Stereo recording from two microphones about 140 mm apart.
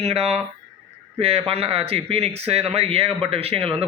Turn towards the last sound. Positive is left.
turn(degrees=-45)  # may be behind; listen again after turning